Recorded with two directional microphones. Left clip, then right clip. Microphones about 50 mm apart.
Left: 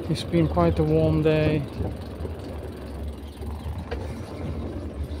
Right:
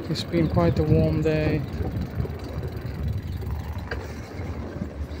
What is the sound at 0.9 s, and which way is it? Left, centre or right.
Speech, left.